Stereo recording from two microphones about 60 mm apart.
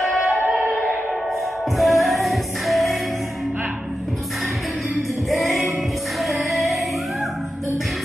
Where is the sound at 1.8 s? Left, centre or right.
Centre.